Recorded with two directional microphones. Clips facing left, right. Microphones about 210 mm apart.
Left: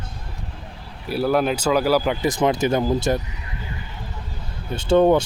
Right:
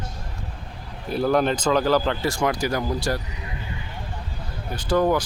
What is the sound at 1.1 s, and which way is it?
Speech, 5° left (ahead or behind).